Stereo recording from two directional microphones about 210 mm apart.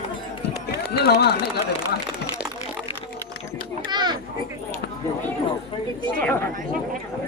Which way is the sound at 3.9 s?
20° right (ahead or behind).